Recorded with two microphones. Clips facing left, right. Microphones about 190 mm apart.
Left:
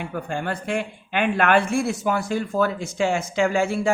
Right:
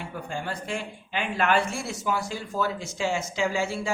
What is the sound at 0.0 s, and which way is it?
Speech, 60° left (ahead or behind).